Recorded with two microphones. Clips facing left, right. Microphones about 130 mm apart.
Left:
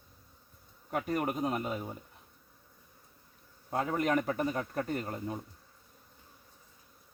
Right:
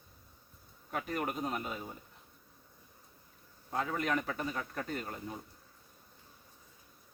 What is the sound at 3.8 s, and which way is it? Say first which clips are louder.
Speech: left 4 dB; 40° left (ahead or behind).